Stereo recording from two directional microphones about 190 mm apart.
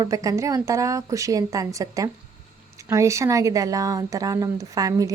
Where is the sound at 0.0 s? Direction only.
15° right (ahead or behind).